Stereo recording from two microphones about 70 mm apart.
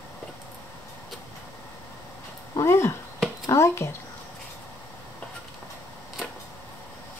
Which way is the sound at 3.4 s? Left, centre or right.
Left.